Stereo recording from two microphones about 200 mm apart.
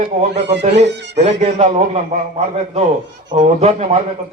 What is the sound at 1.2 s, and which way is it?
Speech, 35° right (ahead or behind).